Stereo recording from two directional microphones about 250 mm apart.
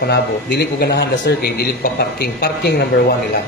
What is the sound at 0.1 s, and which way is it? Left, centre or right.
A man's voice, left.